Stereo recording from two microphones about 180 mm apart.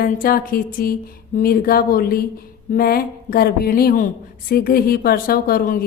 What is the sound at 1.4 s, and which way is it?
Speech, 55° left (ahead or behind).